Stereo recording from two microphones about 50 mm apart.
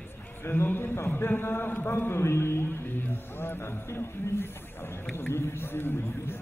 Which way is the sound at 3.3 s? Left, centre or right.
Left.